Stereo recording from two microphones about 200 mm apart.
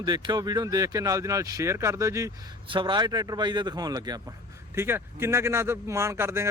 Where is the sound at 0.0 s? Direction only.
20° right (ahead or behind).